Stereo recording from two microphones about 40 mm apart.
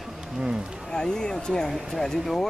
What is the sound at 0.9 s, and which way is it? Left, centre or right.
Speech, centre.